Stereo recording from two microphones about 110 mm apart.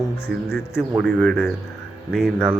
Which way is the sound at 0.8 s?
Centre (ahead or behind).